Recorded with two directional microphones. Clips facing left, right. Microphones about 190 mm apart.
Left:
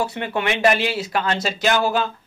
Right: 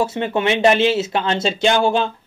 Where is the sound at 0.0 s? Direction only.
20° right (ahead or behind).